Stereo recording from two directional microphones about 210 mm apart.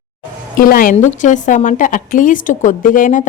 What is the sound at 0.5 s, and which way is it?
A woman's voice, 45° left (ahead or behind).